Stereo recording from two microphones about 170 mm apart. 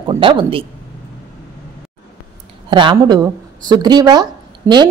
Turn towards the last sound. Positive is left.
turn(degrees=-15)  # may be behind; listen again after turning